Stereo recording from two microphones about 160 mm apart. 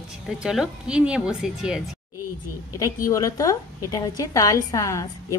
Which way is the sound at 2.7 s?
20° left (ahead or behind).